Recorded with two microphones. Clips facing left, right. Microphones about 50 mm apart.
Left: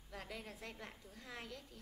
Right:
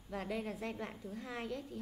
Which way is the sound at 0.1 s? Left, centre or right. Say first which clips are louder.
Right 10 dB; right.